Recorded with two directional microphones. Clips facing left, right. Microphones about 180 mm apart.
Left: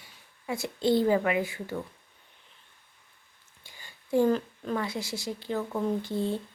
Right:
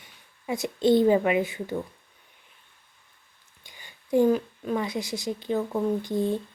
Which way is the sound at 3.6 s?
20° right (ahead or behind).